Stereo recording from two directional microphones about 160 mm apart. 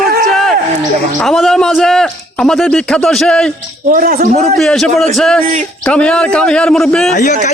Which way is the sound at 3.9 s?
60° right (ahead or behind).